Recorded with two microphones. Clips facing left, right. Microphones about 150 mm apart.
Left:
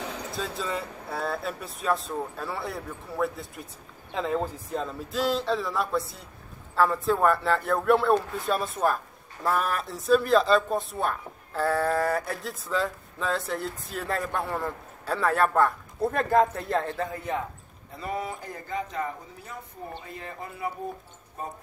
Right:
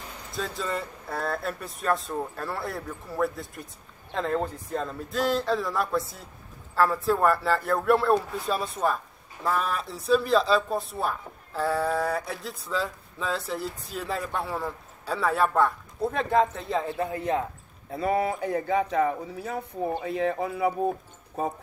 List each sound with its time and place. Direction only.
0.0 s vehicle: 80° left
0.3 s speech: centre (ahead or behind)
17.9 s speech: 60° right (ahead or behind); by 20.7 s 85° right